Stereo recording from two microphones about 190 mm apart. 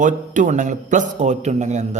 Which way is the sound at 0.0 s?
40° right (ahead or behind).